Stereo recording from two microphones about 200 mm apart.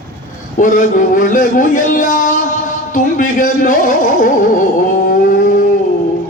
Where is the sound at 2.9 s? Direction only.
40° left (ahead or behind).